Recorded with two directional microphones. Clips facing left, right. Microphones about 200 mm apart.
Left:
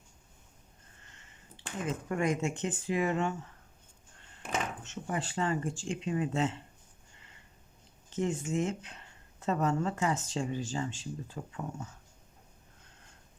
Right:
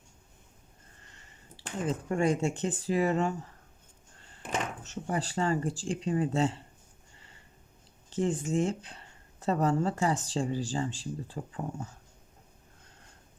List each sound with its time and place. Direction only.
1.1 s speech: 35° right (ahead or behind)
4.8 s speech: 35° right (ahead or behind)
8.1 s speech: 35° right (ahead or behind)